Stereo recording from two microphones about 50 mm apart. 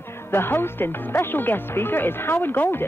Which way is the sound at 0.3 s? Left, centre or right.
Left.